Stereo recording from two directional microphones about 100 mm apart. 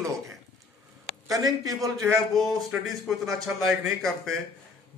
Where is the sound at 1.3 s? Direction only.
35° right (ahead or behind).